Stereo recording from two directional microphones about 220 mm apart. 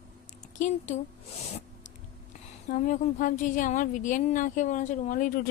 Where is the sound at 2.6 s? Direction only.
35° left (ahead or behind).